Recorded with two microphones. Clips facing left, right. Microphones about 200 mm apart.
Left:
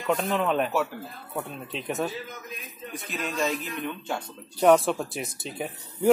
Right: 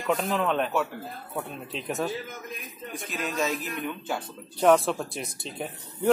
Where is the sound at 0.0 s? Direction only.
Centre (ahead or behind).